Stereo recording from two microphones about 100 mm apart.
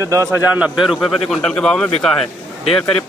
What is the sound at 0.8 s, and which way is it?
A man's voice, centre (ahead or behind).